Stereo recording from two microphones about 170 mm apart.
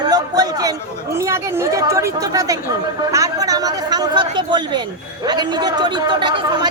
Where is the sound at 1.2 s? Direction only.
15° right (ahead or behind).